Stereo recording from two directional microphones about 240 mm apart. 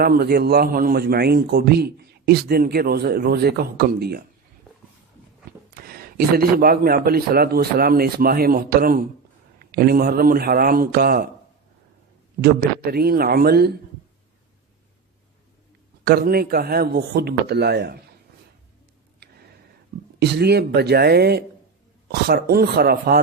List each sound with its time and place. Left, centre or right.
0.0 s a man's voice: right
5.8 s a man's voice: right
12.4 s a man's voice: right
16.0 s a man's voice: right
20.1 s a man's voice: right